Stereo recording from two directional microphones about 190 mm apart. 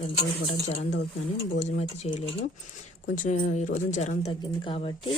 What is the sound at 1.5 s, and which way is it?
Speech, 40° left (ahead or behind).